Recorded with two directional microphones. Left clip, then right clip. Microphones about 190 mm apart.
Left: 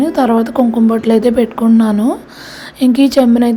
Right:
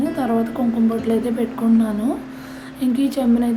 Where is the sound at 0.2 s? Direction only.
45° left (ahead or behind).